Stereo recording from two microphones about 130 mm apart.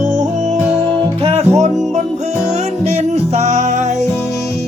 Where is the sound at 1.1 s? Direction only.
45° right (ahead or behind).